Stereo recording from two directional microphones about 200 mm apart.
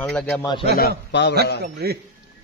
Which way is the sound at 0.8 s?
55° left (ahead or behind).